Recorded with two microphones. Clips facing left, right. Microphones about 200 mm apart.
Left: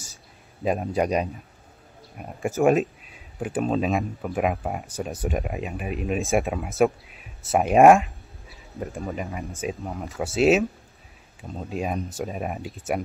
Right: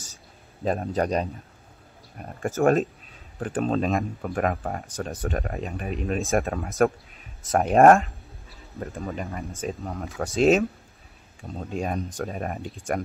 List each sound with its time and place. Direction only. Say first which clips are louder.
0.7 s speech: left 1 dB; 10° left (ahead or behind)